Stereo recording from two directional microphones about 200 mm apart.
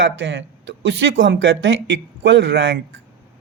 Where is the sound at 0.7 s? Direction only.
65° right (ahead or behind).